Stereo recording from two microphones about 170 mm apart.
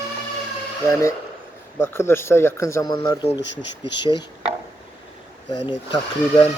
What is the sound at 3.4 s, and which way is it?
Speech, 90° left.